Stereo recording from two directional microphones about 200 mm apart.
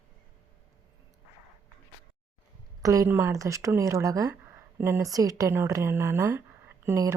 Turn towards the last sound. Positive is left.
turn(degrees=-15)  # may be behind; listen again after turning